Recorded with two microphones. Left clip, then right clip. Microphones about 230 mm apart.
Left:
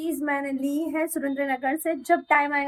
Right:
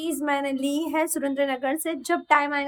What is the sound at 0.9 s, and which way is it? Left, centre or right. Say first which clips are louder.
Speech: right 2 dB; centre.